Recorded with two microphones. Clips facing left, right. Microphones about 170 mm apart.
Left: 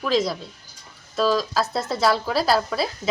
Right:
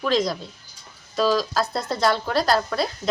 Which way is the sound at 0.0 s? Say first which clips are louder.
Even; 5° left (ahead or behind).